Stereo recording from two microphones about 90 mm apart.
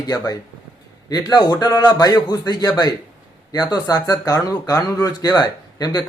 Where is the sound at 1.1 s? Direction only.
50° left (ahead or behind).